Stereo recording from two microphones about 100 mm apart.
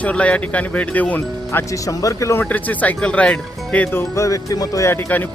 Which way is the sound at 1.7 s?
35° left (ahead or behind).